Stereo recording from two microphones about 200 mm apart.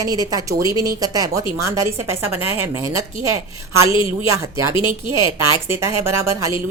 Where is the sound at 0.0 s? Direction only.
20° right (ahead or behind).